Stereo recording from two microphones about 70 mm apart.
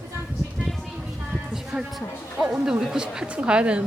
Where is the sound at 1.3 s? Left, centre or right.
Centre.